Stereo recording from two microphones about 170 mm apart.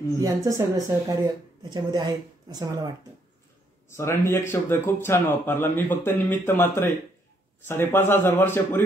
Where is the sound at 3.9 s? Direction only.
15° left (ahead or behind).